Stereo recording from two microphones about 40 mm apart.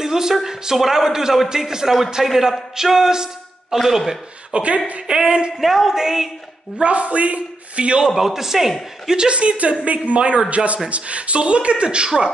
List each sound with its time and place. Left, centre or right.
0.0 s a woman's voice: centre
4.6 s speech: right
5.0 s speech: right
5.6 s a woman's voice: centre
6.8 s speech: right
8.1 s a woman's voice: centre
9.0 s speech: centre